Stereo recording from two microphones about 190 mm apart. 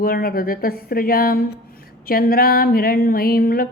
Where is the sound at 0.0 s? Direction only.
50° left (ahead or behind).